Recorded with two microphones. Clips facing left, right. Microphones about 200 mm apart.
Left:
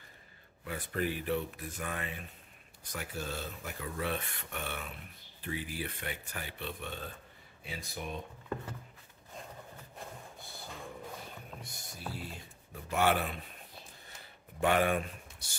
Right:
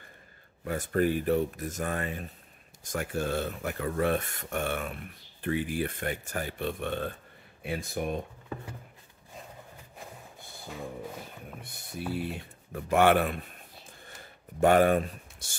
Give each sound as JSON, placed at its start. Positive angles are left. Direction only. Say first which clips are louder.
{"t": 0.7, "sound": "speech", "louder": "right 8 dB", "side_deg": -45}
{"t": 11.6, "sound": "speech", "louder": "right 10 dB", "side_deg": -60}
{"t": 14.6, "sound": "speech", "louder": "right 7 dB", "side_deg": -45}